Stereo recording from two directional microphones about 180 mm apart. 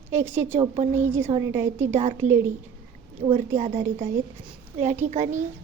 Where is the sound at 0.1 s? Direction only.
15° right (ahead or behind).